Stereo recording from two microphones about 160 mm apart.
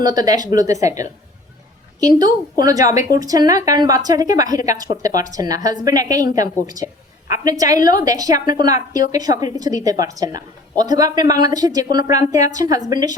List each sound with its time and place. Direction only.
0.0 s a woman's voice: 25° right (ahead or behind)